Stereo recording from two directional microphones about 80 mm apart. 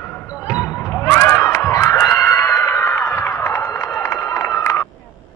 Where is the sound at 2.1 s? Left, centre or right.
Left.